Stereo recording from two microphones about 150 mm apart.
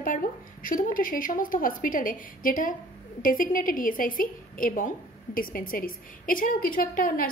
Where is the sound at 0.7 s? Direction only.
65° left (ahead or behind).